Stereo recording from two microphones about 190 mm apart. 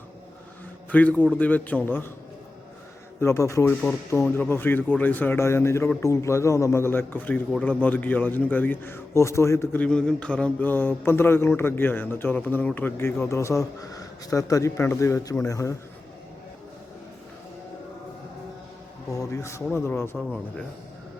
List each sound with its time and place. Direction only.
0.9 s a man's voice: 10° left (ahead or behind)
3.2 s speech: 15° left (ahead or behind)
19.1 s speech: 15° left (ahead or behind)
20.1 s speech: centre (ahead or behind)